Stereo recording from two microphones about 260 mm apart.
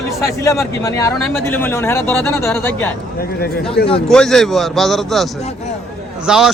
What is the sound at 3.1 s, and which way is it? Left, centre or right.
Speech, left.